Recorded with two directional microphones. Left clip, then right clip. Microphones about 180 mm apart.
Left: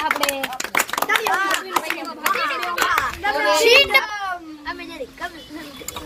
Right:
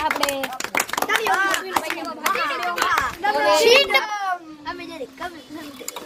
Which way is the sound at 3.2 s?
30° right (ahead or behind).